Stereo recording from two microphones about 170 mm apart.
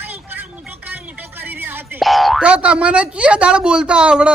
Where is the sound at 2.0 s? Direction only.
Centre (ahead or behind).